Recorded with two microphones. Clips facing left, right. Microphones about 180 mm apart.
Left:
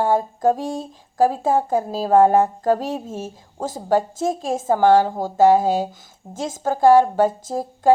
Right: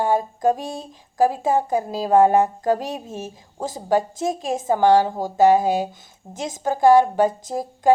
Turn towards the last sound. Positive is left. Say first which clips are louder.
# left 1 dB
turn(degrees=-15)  # may be behind; listen again after turning